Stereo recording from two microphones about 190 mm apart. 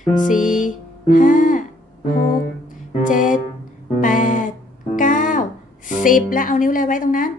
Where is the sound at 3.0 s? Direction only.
45° left (ahead or behind).